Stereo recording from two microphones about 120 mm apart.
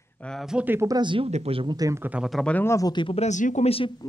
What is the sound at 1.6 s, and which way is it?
Speech, 30° right (ahead or behind).